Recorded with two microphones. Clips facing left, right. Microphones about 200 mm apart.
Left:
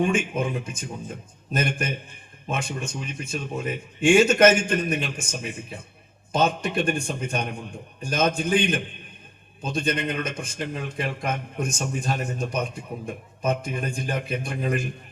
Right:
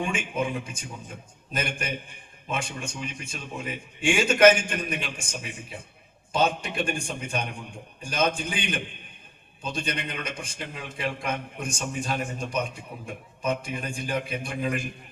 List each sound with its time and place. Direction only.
0.0 s a man's voice: 45° left (ahead or behind)